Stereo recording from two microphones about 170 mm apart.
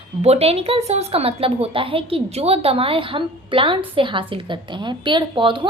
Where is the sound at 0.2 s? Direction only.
40° right (ahead or behind).